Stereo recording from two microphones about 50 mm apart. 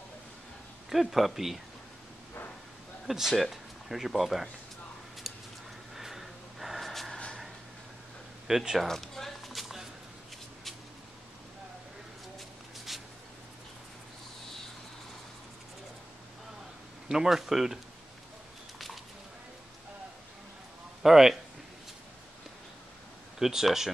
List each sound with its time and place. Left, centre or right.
0.8 s speech: centre
3.1 s speech: centre
5.9 s gasp: centre
6.9 s a sound: centre
8.5 s speech: centre
8.8 s a sound: centre
12.4 s shuffle: centre
17.1 s speech: centre
21.0 s a man's voice: centre
23.4 s speech: centre